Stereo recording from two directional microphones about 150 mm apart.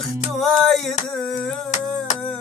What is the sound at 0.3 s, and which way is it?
Music, centre (ahead or behind).